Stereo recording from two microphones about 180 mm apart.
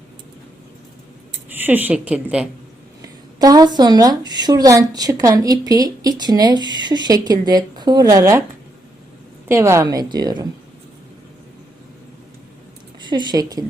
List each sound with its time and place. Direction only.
1.5 s speech: 10° right (ahead or behind)
3.3 s speech: 20° right (ahead or behind)
9.5 s speech: 15° right (ahead or behind)
13.0 s speech: 25° right (ahead or behind)